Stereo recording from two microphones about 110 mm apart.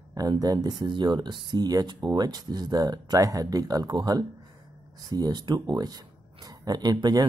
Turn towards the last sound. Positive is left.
turn(degrees=-40)  # may be behind; listen again after turning